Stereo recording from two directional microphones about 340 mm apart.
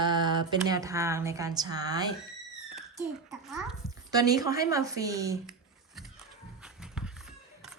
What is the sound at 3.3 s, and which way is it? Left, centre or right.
A child's voice, centre.